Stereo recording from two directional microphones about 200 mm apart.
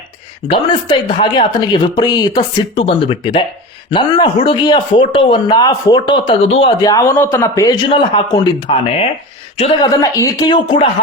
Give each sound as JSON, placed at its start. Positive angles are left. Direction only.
{"t": 0.4, "sound": "speech", "side_deg": 25}